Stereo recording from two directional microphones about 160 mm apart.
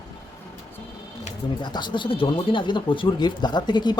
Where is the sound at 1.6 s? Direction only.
30° left (ahead or behind).